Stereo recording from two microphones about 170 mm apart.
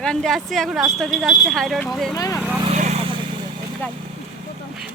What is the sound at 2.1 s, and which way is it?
Speech, 20° left (ahead or behind).